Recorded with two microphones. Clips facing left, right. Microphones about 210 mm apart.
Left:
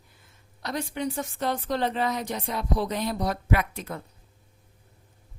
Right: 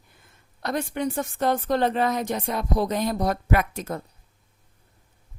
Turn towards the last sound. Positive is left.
turn(degrees=-45)  # may be behind; listen again after turning